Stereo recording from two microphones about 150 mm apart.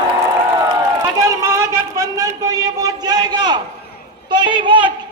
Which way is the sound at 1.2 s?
20° right (ahead or behind).